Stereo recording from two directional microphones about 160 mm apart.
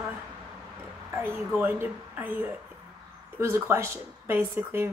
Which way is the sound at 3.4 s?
15° right (ahead or behind).